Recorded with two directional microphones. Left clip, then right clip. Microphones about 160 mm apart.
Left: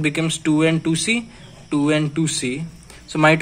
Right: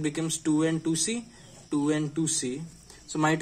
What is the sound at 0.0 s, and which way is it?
Speech, centre (ahead or behind).